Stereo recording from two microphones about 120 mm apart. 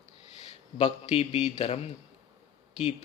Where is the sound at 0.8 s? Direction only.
60° left (ahead or behind).